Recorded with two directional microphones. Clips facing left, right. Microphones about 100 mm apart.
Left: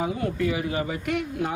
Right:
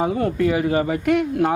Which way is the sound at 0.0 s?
50° right (ahead or behind).